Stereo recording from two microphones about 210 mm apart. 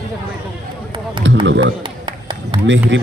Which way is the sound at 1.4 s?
60° right (ahead or behind).